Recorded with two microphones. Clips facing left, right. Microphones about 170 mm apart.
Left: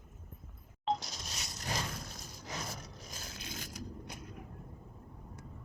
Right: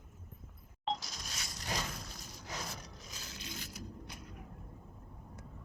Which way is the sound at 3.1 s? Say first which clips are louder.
Left 1 dB; 50° left (ahead or behind).